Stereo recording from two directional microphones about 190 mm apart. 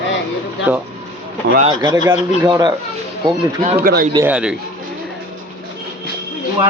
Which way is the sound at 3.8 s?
50° right (ahead or behind).